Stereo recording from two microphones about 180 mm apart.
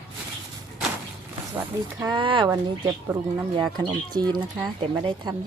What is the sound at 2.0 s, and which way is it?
Speech, 25° right (ahead or behind).